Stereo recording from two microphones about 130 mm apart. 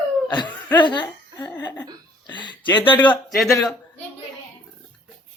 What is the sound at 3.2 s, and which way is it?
Speech, centre (ahead or behind).